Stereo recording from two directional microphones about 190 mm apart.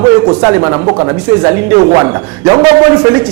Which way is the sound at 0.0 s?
15° right (ahead or behind).